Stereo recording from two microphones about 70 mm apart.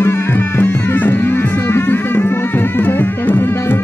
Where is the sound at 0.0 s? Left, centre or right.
Left.